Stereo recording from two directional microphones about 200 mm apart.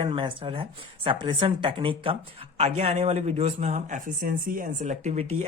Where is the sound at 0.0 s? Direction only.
25° right (ahead or behind).